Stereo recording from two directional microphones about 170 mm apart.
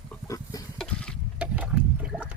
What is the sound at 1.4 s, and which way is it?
Water, 5° right (ahead or behind).